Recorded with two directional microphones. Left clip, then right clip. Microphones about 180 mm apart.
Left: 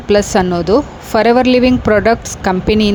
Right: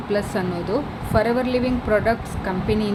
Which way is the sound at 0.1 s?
50° left (ahead or behind).